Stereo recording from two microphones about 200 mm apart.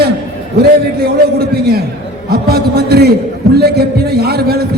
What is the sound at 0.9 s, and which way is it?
A man's voice, 50° right (ahead or behind).